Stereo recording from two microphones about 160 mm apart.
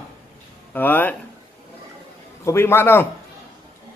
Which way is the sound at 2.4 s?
15° left (ahead or behind).